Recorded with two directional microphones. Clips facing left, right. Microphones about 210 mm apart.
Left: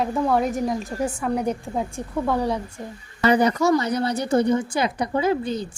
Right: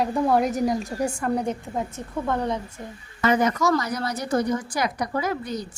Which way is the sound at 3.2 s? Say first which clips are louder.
Left 3 dB; 35° left (ahead or behind).